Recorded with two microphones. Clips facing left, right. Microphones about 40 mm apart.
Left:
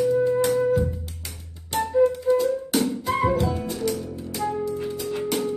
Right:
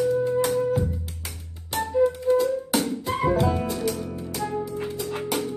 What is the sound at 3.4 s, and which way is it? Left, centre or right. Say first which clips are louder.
Music: right 2 dB; right.